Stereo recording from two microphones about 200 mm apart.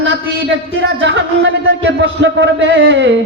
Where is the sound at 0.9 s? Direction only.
65° right (ahead or behind).